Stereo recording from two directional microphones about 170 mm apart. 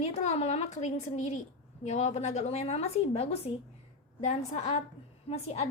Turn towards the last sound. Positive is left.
turn(degrees=35)  # may be behind; listen again after turning